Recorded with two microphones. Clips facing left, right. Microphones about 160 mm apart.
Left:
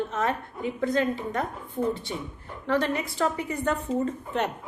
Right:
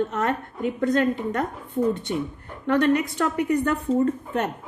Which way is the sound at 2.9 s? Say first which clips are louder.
Right 5 dB; 65° right (ahead or behind).